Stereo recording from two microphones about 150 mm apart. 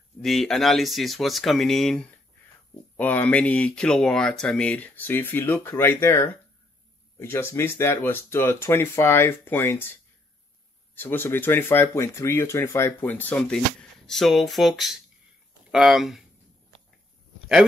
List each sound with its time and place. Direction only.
0.2 s speech: centre (ahead or behind)
11.0 s speech: 15° left (ahead or behind); by 16.3 s centre (ahead or behind)